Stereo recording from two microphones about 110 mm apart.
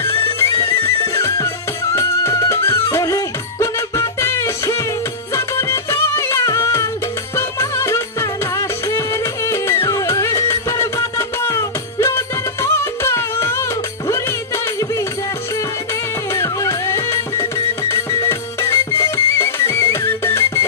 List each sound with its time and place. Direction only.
0.4 s music: 25° left (ahead or behind)
16.3 s music: 25° left (ahead or behind)